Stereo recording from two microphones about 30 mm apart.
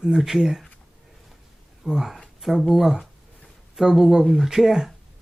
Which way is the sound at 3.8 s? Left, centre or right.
Centre.